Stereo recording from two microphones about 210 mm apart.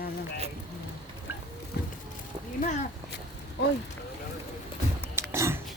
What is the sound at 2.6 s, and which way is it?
Speech, 35° left (ahead or behind).